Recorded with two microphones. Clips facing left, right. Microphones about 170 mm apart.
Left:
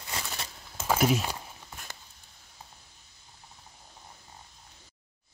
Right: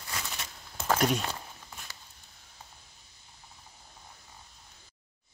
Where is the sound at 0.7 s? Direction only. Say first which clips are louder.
Left 2 dB; 5° left (ahead or behind).